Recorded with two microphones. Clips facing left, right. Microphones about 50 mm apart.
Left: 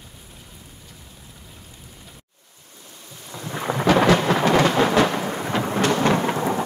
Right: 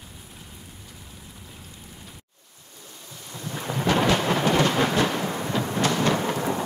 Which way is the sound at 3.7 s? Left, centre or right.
Left.